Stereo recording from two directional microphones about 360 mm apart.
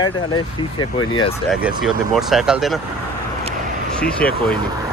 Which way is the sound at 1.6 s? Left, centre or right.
Centre.